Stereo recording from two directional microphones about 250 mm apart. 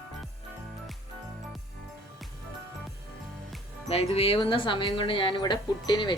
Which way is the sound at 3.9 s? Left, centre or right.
Left.